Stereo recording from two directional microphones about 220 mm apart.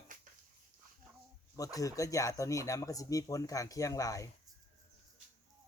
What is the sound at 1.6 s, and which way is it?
Speech, 15° left (ahead or behind).